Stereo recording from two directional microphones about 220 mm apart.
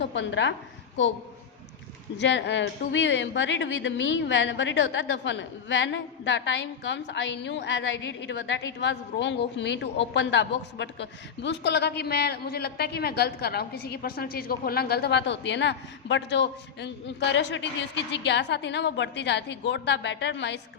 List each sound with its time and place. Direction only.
0.0 s a woman's voice: 55° left (ahead or behind)
2.1 s a woman's voice: 50° left (ahead or behind)